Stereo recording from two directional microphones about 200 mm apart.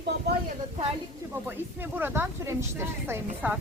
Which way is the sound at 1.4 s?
10° right (ahead or behind).